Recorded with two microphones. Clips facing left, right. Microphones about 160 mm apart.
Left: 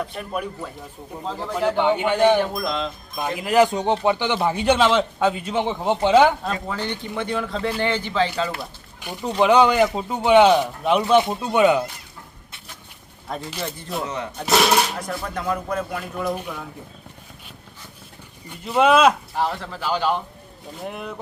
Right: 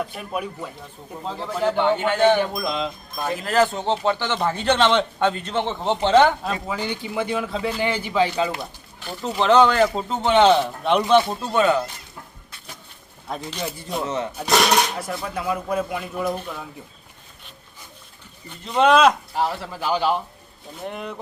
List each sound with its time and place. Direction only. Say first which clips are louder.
0.1 s speech: left 1 dB; 5° right (ahead or behind)
1.8 s a man's voice: left 1 dB; 15° left (ahead or behind)
2.4 s speech: even; centre (ahead or behind)
3.2 s a man's voice: left 2 dB; 15° left (ahead or behind)
6.4 s a man's voice: even; 5° right (ahead or behind)
9.0 s a man's voice: left 3 dB; 15° left (ahead or behind)
13.3 s speech: even; centre (ahead or behind)
16.3 s a man's voice: left 1 dB; 10° left (ahead or behind)
18.6 s a man's voice: even; 5° left (ahead or behind)
19.4 s a man's voice: even; 10° right (ahead or behind)
20.7 s speech: even; centre (ahead or behind)